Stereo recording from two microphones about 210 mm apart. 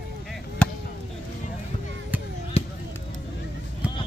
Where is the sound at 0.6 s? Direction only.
5° left (ahead or behind).